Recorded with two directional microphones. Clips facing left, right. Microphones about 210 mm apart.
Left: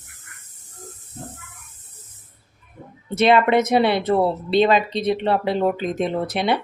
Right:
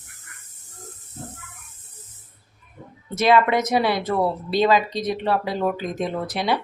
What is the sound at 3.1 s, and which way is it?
Speech, 25° left (ahead or behind).